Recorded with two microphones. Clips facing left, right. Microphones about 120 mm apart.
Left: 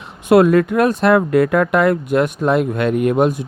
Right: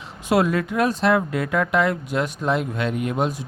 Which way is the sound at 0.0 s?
60° left (ahead or behind).